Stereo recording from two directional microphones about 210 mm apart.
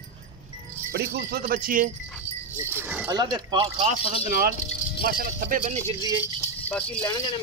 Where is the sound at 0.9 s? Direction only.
50° right (ahead or behind).